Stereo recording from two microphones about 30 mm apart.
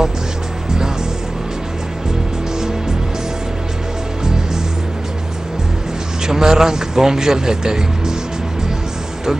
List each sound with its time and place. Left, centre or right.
6.2 s speech: right